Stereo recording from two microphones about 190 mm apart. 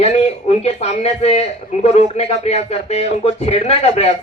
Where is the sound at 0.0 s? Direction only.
35° left (ahead or behind).